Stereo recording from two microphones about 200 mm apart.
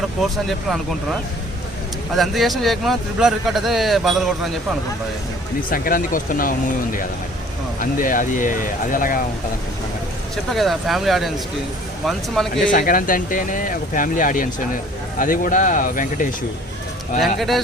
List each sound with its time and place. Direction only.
0.2 s speech: centre (ahead or behind)
2.1 s speech: centre (ahead or behind)
5.7 s speech: 45° left (ahead or behind)
7.8 s speech: 45° left (ahead or behind)
10.5 s speech: centre (ahead or behind)
12.7 s speech: 45° left (ahead or behind)
17.2 s speech: centre (ahead or behind)